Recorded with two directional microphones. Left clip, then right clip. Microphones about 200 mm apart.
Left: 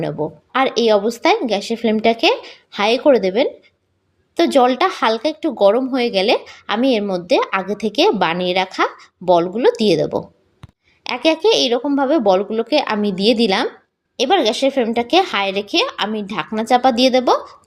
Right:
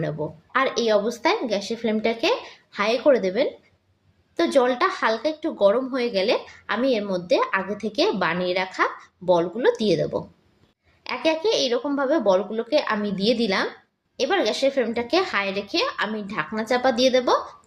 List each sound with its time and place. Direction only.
0.0 s a woman's voice: 40° left (ahead or behind)